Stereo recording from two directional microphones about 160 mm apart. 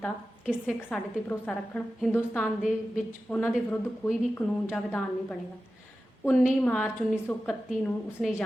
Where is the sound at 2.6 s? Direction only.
5° right (ahead or behind).